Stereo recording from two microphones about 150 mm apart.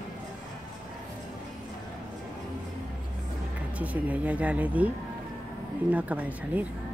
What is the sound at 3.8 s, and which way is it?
Speech, 10° right (ahead or behind).